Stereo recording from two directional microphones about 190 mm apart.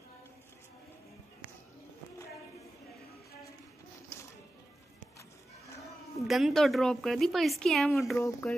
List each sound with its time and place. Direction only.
6.2 s speech: centre (ahead or behind)